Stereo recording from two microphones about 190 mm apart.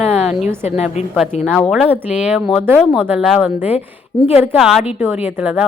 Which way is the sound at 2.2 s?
5° right (ahead or behind).